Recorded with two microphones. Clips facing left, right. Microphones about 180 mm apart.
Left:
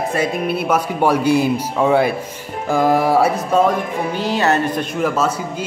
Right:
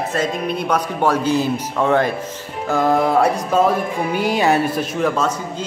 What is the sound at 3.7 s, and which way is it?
Speech, 10° right (ahead or behind).